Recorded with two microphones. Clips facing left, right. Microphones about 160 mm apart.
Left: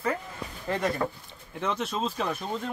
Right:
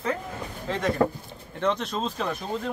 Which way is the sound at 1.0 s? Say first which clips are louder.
Right 7 dB; 55° right (ahead or behind).